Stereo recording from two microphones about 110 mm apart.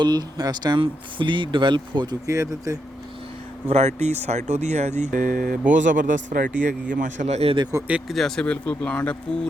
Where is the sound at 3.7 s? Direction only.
85° right.